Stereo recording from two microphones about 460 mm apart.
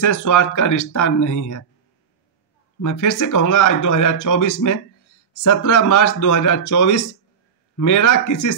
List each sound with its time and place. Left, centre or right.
0.0 s speech: left
2.8 s speech: left